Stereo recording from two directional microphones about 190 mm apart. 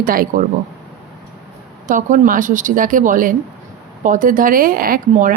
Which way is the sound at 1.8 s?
40° right (ahead or behind).